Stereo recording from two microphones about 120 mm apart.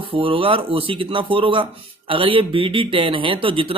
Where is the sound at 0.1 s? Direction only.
50° right (ahead or behind).